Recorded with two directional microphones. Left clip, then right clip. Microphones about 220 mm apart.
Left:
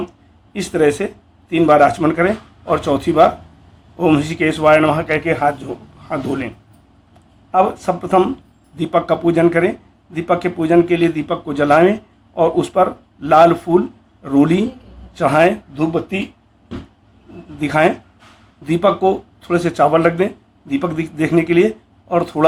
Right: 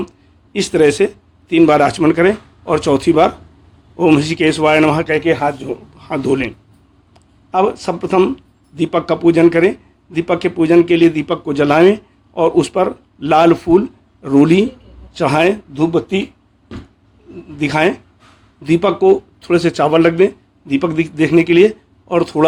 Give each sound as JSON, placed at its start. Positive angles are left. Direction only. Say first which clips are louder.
{"t": 0.7, "sound": "speech", "louder": "right 3 dB", "side_deg": -45}
{"t": 6.1, "sound": "speech", "louder": "right 2 dB", "side_deg": -45}
{"t": 7.5, "sound": "speech", "louder": "even", "side_deg": -35}
{"t": 17.6, "sound": "speech", "louder": "even", "side_deg": -35}